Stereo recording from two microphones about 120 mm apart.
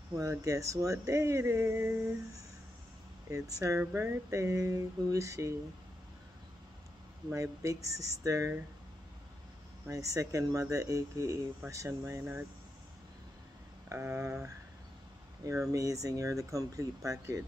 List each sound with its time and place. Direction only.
0.1 s speech: 30° right (ahead or behind)
3.3 s speech: 25° right (ahead or behind)
7.6 s speech: 25° right (ahead or behind)
9.8 s speech: 25° right (ahead or behind)
13.8 s speech: 25° right (ahead or behind)
15.7 s speech: 25° right (ahead or behind)